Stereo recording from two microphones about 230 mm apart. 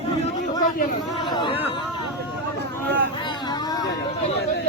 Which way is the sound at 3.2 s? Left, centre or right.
Centre.